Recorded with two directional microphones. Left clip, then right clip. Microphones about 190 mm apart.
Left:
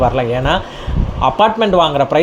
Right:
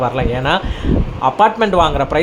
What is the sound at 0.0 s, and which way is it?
Speech, 5° left (ahead or behind).